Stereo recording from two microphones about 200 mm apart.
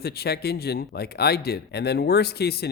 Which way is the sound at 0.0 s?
50° left (ahead or behind).